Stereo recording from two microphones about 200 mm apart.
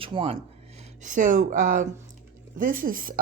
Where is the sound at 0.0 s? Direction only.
25° right (ahead or behind).